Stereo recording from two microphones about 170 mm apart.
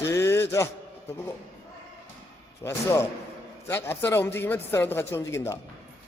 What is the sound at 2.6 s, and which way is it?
Speech, 15° left (ahead or behind).